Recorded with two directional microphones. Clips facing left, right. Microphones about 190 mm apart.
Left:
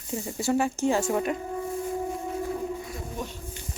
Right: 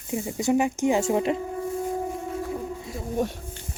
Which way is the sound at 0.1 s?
15° right (ahead or behind).